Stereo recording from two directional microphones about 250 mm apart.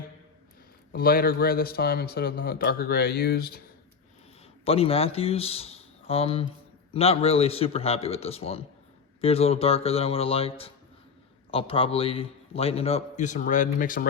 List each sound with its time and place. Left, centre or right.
0.9 s speech: left
4.6 s a man's voice: left